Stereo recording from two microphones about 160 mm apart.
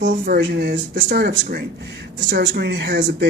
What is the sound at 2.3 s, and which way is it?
Speech, 90° right.